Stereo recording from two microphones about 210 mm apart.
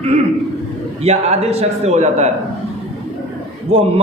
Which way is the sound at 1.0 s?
30° right (ahead or behind).